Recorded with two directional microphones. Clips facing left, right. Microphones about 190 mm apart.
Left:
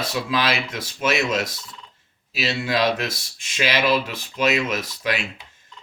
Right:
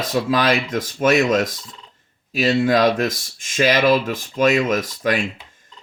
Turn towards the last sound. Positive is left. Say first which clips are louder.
# right 5 dB
turn(degrees=-45)  # may be behind; listen again after turning